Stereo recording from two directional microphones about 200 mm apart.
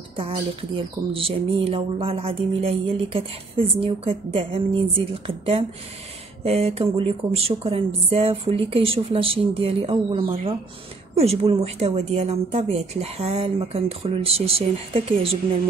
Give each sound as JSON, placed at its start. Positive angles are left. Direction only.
{"t": 0.7, "sound": "speech", "side_deg": -25}